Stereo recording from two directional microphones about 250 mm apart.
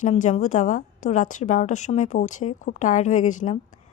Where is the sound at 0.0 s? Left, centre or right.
Left.